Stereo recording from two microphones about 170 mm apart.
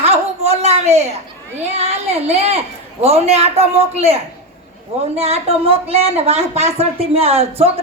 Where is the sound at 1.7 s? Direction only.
40° right (ahead or behind).